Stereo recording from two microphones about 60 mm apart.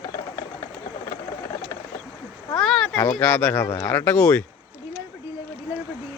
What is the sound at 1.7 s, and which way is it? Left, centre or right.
Wild animals, left.